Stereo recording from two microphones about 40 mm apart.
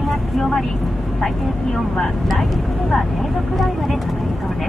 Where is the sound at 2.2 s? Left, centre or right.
Centre.